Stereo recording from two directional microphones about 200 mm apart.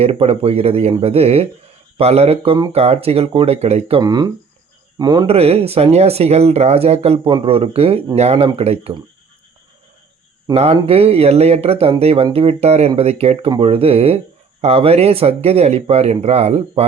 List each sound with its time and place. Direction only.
0.0 s speech: 30° right (ahead or behind)
10.5 s speech: 30° right (ahead or behind)